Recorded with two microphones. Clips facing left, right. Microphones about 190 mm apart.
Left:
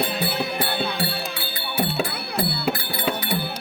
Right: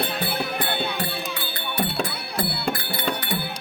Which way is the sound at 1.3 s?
10° left (ahead or behind).